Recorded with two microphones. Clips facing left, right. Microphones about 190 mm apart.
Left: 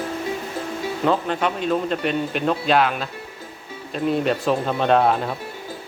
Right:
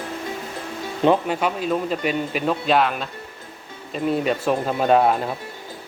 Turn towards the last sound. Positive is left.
turn(degrees=-5)  # may be behind; listen again after turning